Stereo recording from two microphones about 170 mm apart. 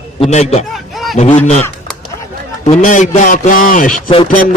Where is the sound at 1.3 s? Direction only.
45° left (ahead or behind).